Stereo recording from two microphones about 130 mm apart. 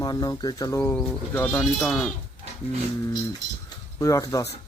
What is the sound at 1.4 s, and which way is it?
Speech, 10° left (ahead or behind).